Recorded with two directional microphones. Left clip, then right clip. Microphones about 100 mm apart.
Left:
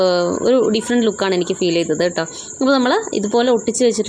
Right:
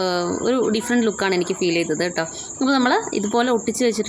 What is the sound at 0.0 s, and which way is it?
Speech, 25° left (ahead or behind).